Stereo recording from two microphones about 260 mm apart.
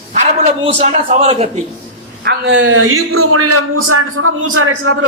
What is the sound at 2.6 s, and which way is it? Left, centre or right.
A man's voice, right.